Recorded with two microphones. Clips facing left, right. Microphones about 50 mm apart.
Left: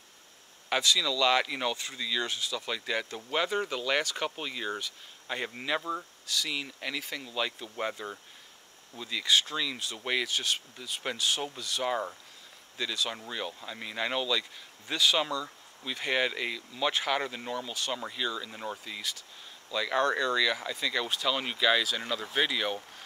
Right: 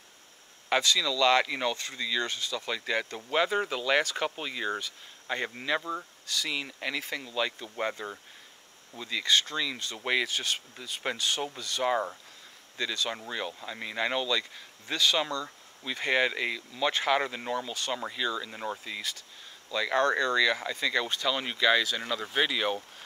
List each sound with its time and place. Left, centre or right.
0.7 s speech: centre